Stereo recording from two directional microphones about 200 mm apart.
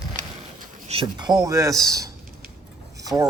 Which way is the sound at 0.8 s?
25° right (ahead or behind).